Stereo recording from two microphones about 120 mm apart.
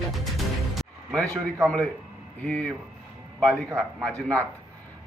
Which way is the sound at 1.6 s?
10° left (ahead or behind).